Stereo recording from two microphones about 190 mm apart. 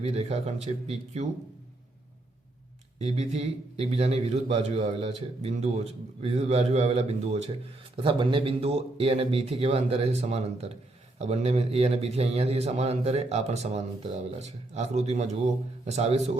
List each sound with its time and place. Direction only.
0.0 s a man's voice: 35° right (ahead or behind)
3.0 s a man's voice: 35° right (ahead or behind)